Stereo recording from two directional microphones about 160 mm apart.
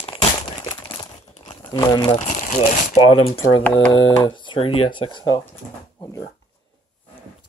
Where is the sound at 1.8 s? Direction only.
30° left (ahead or behind).